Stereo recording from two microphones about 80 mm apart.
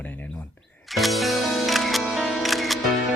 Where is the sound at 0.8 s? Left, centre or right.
Centre.